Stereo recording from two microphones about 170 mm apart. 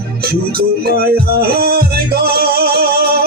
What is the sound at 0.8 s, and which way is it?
Music, 60° right (ahead or behind).